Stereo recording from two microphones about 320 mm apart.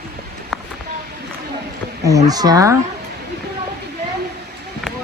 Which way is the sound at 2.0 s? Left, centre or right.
Centre.